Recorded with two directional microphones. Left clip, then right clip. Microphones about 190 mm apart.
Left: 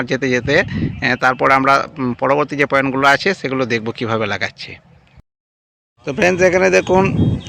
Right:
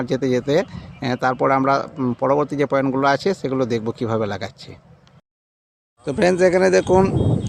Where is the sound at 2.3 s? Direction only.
10° right (ahead or behind).